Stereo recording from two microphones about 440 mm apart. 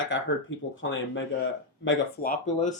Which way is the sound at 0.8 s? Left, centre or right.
Left.